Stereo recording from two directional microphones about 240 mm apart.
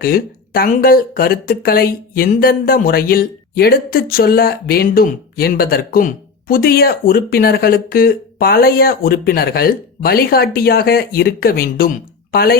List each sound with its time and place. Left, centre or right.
0.0 s speech: left